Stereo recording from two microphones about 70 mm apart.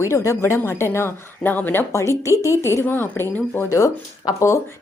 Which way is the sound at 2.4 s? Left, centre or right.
Left.